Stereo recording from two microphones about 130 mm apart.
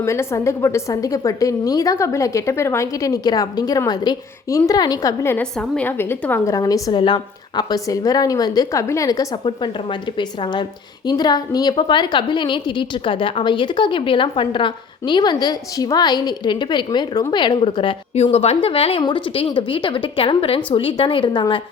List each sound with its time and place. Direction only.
0.0 s a woman's voice: 20° left (ahead or behind)
5.4 s a woman's voice: 10° left (ahead or behind); by 17.7 s 35° left (ahead or behind)
18.1 s a woman's voice: 55° left (ahead or behind); by 21.6 s 40° left (ahead or behind)